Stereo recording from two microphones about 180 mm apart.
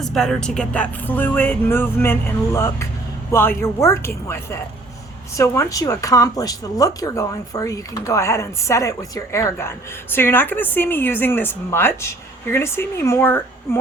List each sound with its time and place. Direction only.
0.0 s speech: centre (ahead or behind)